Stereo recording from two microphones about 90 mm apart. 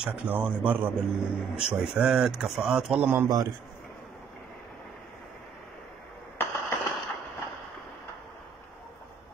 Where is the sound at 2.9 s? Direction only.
20° right (ahead or behind).